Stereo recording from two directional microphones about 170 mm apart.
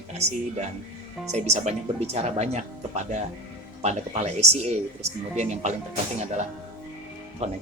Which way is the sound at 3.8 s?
40° right (ahead or behind).